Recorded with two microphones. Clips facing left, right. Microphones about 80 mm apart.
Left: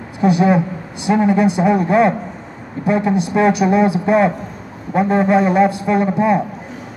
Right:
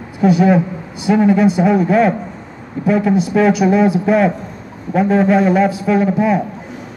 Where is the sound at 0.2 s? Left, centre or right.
Centre.